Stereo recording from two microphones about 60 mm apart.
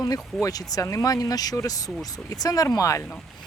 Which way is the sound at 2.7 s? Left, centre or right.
Left.